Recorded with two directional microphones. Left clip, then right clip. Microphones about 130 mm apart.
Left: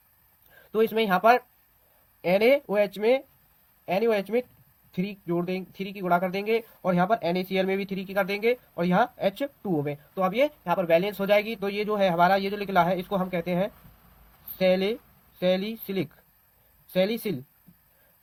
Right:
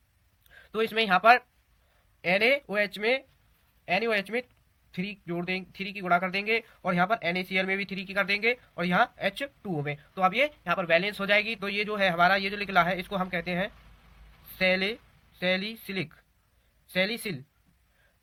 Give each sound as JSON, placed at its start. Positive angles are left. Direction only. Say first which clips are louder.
{"t": 0.7, "sound": "speech", "louder": "left 2 dB", "side_deg": 55}